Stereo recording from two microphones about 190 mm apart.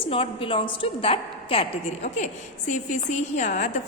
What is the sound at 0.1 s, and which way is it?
A woman's voice, 30° left (ahead or behind).